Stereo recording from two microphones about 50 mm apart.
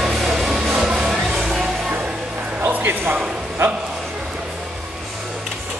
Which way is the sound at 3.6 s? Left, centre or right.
Right.